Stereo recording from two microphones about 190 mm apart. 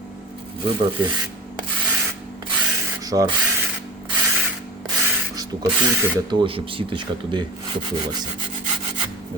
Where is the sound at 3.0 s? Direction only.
20° right (ahead or behind).